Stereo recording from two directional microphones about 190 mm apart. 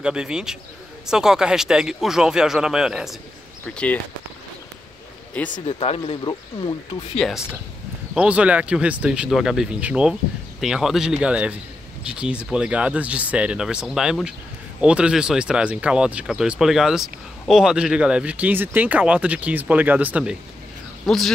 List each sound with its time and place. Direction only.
0.0 s speech: 5° right (ahead or behind)
3.6 s speech: 10° left (ahead or behind)
5.4 s speech: 5° left (ahead or behind)
5.7 s speech: 30° left (ahead or behind)
7.2 s speech: centre (ahead or behind)